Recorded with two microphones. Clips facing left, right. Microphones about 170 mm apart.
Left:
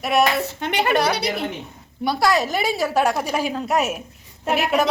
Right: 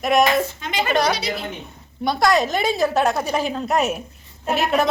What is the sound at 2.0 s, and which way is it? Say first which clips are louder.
A woman's voice: right 1 dB; 5° left (ahead or behind).